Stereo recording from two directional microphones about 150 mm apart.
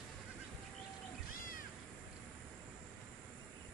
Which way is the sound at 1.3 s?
70° left (ahead or behind).